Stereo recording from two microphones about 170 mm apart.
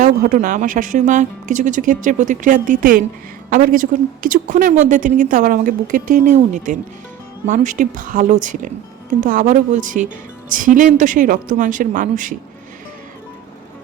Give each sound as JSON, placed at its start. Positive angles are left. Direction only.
{"t": 0.0, "sound": "a woman's voice", "side_deg": -50}